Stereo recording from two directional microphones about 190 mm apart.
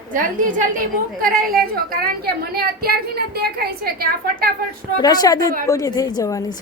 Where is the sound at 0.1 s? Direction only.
45° right (ahead or behind).